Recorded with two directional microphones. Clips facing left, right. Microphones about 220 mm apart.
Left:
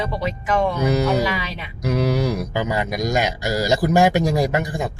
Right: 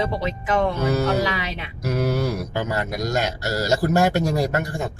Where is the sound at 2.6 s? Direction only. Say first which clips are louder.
Left 2 dB; 15° left (ahead or behind).